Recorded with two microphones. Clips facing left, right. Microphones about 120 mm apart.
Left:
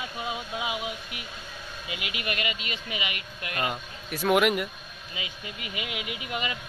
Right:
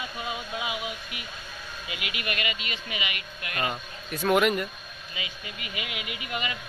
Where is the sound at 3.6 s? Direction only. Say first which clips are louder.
Right 1 dB; 5° left (ahead or behind).